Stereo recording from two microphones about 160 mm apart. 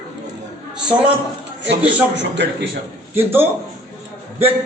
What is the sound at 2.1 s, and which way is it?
Speech, 90° right.